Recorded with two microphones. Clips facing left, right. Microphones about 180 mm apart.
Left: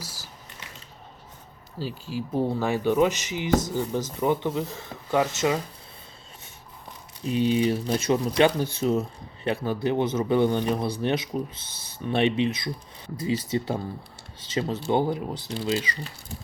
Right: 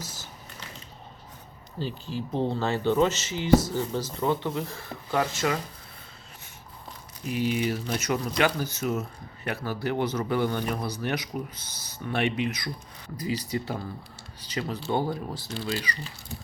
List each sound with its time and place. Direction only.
1.8 s speech: 5° left (ahead or behind)
7.3 s speech: 25° left (ahead or behind)